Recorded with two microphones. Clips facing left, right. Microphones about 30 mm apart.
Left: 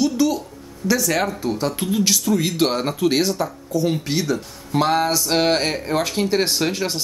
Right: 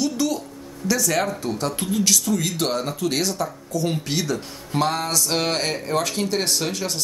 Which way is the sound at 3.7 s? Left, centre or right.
Centre.